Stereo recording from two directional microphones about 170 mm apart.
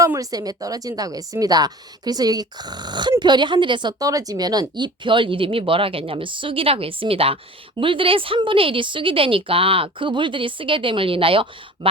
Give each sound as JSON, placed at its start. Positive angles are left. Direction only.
{"t": 0.0, "sound": "a woman's voice", "side_deg": -20}